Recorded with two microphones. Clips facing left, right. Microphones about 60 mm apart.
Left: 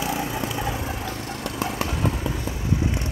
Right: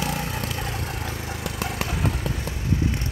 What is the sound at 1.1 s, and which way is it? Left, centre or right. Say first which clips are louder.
Vehicle: left 1 dB; centre.